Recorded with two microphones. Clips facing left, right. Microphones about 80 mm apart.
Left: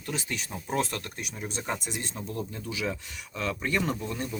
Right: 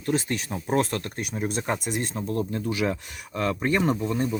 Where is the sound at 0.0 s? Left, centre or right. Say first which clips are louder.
Right 8 dB; right.